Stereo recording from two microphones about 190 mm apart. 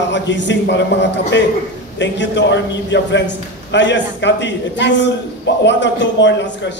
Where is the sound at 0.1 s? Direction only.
70° left (ahead or behind).